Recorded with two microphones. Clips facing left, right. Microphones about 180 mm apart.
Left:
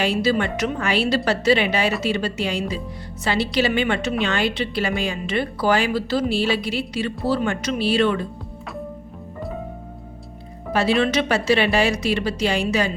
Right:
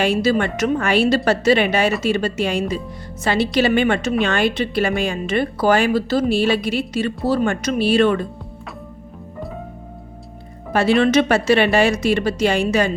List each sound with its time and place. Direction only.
0.0 s a woman's voice: 50° right (ahead or behind)
10.7 s a woman's voice: 50° right (ahead or behind)